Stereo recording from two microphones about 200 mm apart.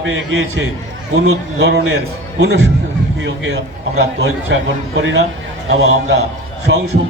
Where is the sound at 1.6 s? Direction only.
60° right (ahead or behind).